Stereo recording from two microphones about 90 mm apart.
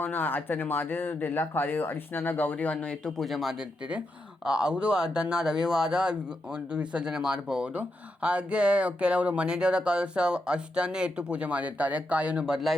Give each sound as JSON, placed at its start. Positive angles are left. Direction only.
{"t": 0.0, "sound": "speech", "side_deg": 20}